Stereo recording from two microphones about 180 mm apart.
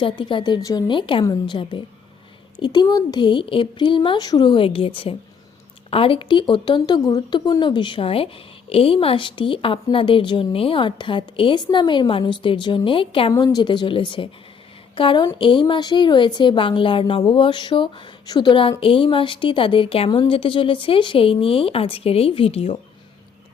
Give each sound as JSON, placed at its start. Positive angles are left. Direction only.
{"t": 0.0, "sound": "a woman's voice", "side_deg": 25}